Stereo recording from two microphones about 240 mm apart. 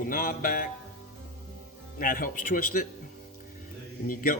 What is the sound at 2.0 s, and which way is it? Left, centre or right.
Speech, left.